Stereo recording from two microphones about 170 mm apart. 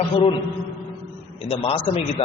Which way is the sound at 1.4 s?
35° left (ahead or behind).